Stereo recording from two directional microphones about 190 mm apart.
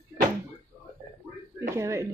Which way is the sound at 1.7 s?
15° right (ahead or behind).